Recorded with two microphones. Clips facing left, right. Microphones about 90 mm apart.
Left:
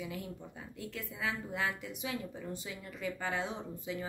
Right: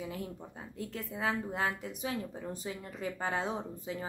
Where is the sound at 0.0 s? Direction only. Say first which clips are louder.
Right 2 dB; 35° right (ahead or behind).